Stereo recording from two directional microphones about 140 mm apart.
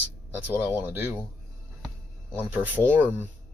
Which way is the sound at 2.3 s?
15° right (ahead or behind).